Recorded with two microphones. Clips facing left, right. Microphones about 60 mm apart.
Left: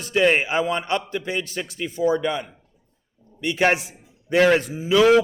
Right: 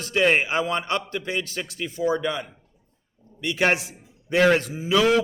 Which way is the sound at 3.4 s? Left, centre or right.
Left.